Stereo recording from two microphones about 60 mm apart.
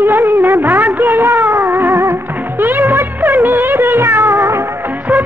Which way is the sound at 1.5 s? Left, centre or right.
Right.